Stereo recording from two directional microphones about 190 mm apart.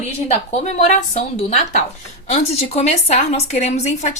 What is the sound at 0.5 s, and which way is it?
A woman's voice, 35° left (ahead or behind).